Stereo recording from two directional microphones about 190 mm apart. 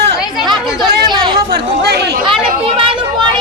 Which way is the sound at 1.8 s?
60° right (ahead or behind).